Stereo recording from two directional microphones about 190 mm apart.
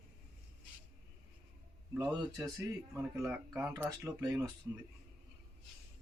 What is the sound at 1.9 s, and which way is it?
Speech, 10° right (ahead or behind).